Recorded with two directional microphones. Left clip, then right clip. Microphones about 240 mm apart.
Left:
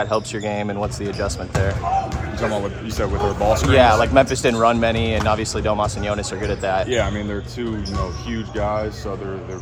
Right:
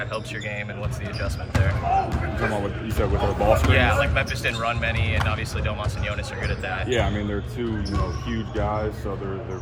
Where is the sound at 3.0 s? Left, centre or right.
Centre.